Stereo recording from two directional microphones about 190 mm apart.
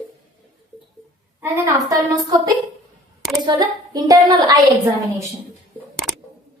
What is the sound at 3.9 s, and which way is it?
Speech, 20° right (ahead or behind).